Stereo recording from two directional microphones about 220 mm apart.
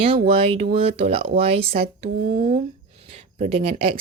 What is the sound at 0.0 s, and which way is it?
Speech, 25° right (ahead or behind).